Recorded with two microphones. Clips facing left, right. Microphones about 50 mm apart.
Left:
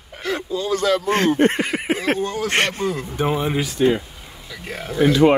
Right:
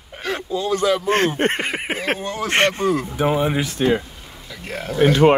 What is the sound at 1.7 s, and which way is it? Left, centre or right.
Speech, right.